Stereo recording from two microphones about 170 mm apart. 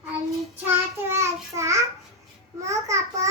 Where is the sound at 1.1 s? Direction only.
15° right (ahead or behind).